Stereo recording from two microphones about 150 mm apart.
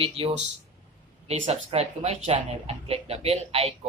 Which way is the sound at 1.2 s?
40° right (ahead or behind).